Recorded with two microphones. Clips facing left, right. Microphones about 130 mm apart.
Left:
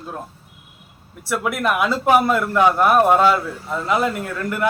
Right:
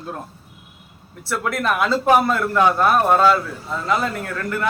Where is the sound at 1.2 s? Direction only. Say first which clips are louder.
Left 1 dB; 10° left (ahead or behind).